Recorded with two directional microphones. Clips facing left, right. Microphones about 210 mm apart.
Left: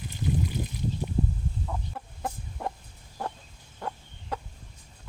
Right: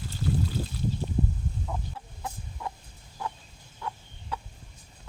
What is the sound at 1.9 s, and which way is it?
Chicken, 50° left (ahead or behind).